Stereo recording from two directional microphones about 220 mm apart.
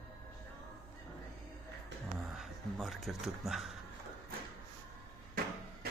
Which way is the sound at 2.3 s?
Centre (ahead or behind).